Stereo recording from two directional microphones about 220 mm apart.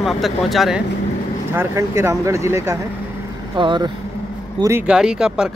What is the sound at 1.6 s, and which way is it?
Speech, 10° right (ahead or behind).